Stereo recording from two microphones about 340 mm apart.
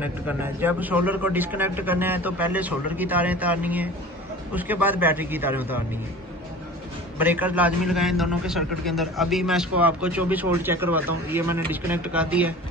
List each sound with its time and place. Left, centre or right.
0.0 s a man's voice: centre
7.2 s a man's voice: centre